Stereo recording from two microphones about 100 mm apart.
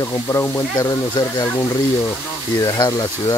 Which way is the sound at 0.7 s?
45° left (ahead or behind).